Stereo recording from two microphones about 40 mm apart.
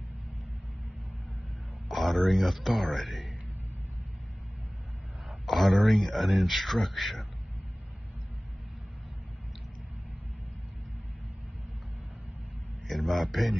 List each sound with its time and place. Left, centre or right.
1.9 s speech: centre
5.5 s speech: centre
12.8 s a man's voice: centre